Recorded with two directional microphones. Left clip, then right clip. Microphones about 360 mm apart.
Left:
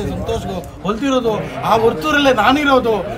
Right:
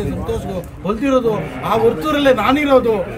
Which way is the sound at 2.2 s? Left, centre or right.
Centre.